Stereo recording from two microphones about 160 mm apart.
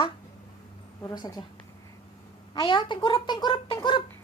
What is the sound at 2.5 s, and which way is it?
Speech, 30° left (ahead or behind).